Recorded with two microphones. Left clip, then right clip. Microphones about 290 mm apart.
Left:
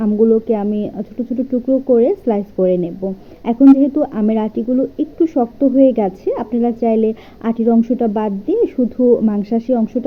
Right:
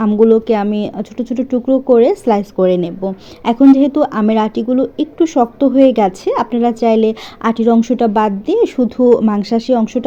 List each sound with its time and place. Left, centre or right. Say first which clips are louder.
0.0 s a woman's voice: right 3 dB; right